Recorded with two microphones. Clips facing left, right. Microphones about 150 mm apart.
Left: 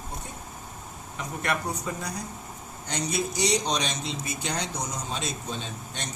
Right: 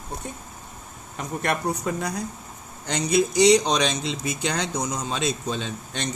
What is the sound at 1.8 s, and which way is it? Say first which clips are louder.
Speech: right 6 dB; 65° right (ahead or behind).